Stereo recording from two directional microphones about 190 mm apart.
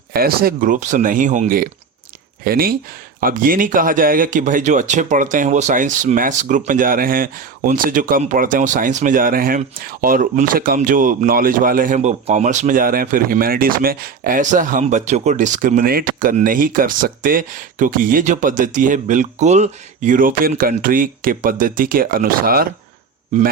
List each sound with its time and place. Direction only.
0.1 s speech: 50° right (ahead or behind)